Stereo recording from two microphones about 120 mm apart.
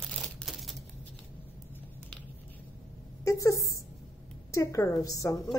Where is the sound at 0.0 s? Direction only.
5° left (ahead or behind).